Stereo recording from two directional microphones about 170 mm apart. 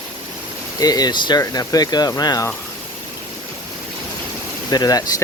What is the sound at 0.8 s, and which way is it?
Speech, 20° left (ahead or behind).